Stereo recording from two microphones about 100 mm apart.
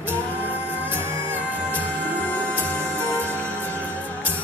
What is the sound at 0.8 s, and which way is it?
Music, 20° right (ahead or behind).